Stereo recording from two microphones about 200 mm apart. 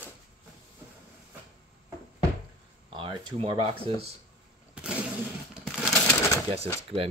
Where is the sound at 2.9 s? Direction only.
25° right (ahead or behind).